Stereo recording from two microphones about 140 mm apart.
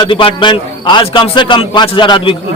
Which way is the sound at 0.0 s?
40° left (ahead or behind).